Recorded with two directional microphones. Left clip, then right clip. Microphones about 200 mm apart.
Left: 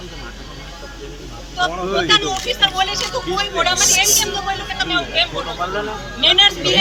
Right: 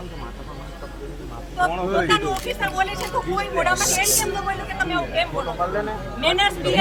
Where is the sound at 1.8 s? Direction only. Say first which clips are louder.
Left 6 dB; 5° right (ahead or behind).